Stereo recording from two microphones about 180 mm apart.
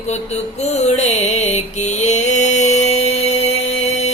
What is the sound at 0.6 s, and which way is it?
Mantra, 40° left (ahead or behind).